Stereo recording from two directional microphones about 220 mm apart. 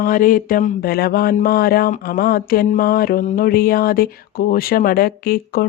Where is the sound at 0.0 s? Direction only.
40° left (ahead or behind).